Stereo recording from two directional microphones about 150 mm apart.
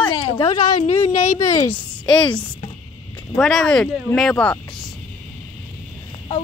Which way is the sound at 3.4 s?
Centre (ahead or behind).